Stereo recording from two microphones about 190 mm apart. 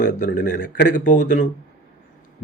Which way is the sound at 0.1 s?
40° left (ahead or behind).